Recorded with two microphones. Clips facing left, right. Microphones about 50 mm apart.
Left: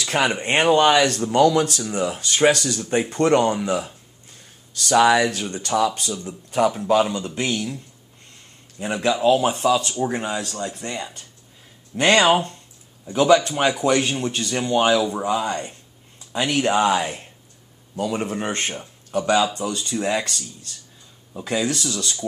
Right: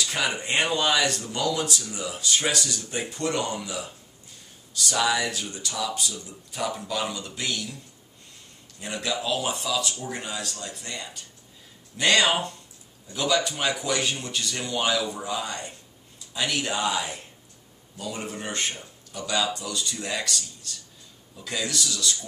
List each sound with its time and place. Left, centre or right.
0.0 s a sound: left
0.3 s speech: left
4.9 s speech: left
8.7 s speech: left
19.9 s speech: left